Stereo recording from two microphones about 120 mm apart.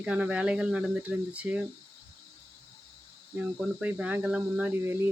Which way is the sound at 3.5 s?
10° right (ahead or behind).